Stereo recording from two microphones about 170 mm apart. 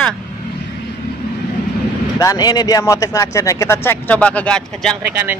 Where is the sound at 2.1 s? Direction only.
20° left (ahead or behind); by 4.9 s 5° left (ahead or behind).